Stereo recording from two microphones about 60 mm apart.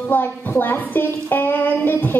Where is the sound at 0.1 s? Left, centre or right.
Left.